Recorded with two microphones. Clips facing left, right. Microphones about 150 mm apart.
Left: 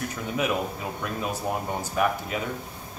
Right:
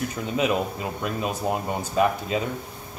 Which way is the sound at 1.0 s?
20° right (ahead or behind).